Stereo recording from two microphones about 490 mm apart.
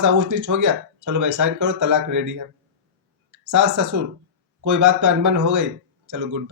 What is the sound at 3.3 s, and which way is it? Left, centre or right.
Speech, right.